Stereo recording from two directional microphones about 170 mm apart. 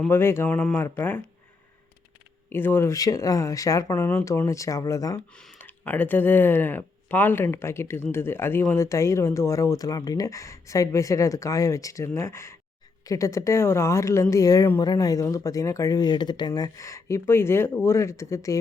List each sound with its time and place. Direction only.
0.0 s speech: 15° left (ahead or behind)
2.5 s speech: 15° left (ahead or behind)
5.3 s speech: 5° left (ahead or behind)